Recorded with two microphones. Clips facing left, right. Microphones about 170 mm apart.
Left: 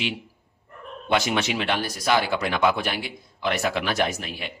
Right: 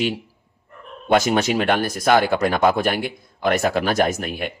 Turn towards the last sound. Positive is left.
turn(degrees=-50)  # may be behind; listen again after turning